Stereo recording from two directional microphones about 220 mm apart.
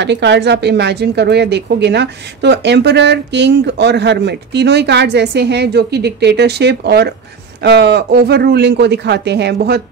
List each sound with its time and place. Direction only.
0.0 s a woman's voice: 50° right (ahead or behind)